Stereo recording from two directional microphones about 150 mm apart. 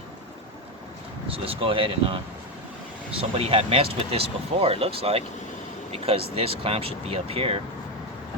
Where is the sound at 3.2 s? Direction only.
40° right (ahead or behind).